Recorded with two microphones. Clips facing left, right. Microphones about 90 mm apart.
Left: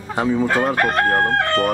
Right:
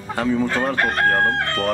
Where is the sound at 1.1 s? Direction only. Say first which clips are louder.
Left 2 dB; 20° left (ahead or behind).